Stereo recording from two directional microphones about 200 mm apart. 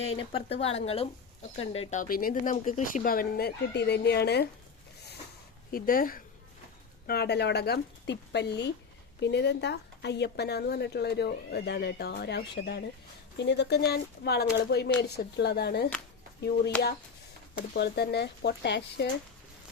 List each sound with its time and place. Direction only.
0.0 s speech: 30° left (ahead or behind); by 4.4 s 55° left (ahead or behind)
5.7 s a woman's voice: 45° left (ahead or behind)
17.7 s a woman's voice: 55° left (ahead or behind)